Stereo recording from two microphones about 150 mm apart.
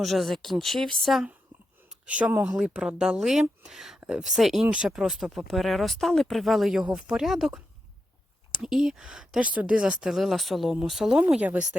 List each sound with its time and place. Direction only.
0.0 s speech: centre (ahead or behind)